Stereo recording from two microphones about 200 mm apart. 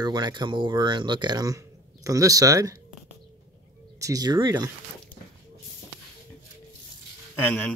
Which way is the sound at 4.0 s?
15° right (ahead or behind).